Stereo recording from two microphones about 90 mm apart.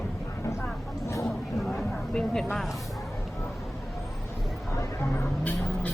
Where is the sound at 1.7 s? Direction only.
10° left (ahead or behind).